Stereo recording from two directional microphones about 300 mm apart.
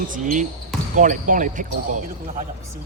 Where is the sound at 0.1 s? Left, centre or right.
Right.